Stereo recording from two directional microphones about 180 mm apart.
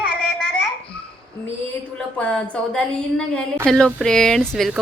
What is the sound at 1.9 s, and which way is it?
A woman's voice, 5° left (ahead or behind).